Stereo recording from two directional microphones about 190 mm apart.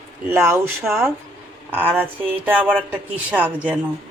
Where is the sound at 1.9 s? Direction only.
10° right (ahead or behind).